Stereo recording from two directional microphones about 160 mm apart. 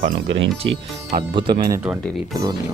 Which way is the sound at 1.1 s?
30° right (ahead or behind).